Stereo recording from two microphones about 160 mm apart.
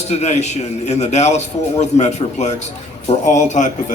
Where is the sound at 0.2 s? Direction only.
45° left (ahead or behind).